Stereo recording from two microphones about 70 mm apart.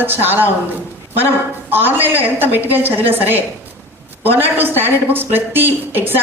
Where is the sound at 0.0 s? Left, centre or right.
Right.